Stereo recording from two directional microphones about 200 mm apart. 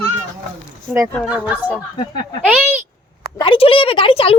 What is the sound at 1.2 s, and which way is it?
Speech, 5° right (ahead or behind).